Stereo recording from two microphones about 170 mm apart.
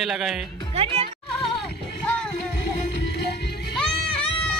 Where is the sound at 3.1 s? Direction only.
75° left (ahead or behind).